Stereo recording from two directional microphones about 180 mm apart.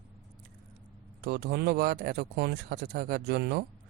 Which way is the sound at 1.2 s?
60° right (ahead or behind).